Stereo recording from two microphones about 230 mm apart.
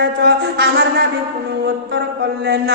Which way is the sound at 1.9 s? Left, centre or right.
Right.